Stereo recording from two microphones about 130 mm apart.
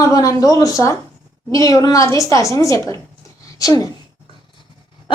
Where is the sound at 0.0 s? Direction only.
25° left (ahead or behind).